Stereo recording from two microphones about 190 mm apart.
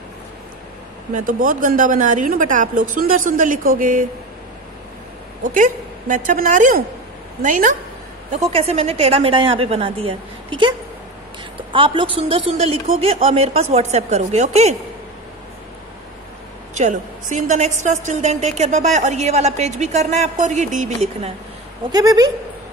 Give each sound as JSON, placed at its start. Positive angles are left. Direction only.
{"t": 1.1, "sound": "a woman's voice", "side_deg": -45}
{"t": 5.4, "sound": "a woman's voice", "side_deg": -45}
{"t": 8.3, "sound": "a woman's voice", "side_deg": -30}
{"t": 11.7, "sound": "a woman's voice", "side_deg": -25}
{"t": 16.7, "sound": "a woman's voice", "side_deg": -40}
{"t": 21.9, "sound": "a woman's voice", "side_deg": -20}